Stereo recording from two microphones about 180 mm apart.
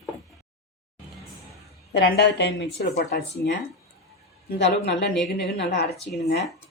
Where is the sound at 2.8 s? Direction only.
65° left (ahead or behind).